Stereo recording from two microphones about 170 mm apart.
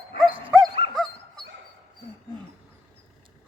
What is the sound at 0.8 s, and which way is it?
Dog, 70° left (ahead or behind).